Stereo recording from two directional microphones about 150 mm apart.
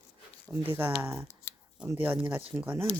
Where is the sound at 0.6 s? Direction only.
15° right (ahead or behind).